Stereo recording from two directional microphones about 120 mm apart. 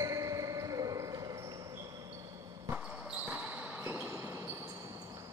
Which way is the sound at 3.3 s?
15° right (ahead or behind).